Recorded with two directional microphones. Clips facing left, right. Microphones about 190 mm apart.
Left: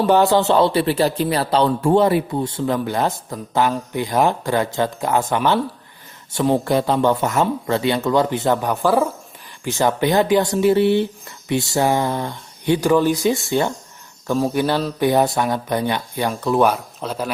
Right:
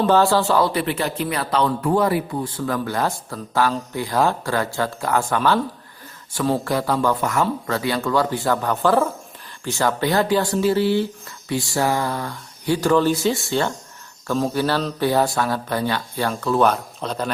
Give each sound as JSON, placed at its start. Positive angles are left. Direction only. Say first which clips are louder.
{"t": 0.0, "sound": "speech", "louder": "left 2 dB", "side_deg": 20}